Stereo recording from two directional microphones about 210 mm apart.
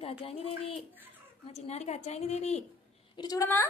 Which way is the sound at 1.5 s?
30° left (ahead or behind).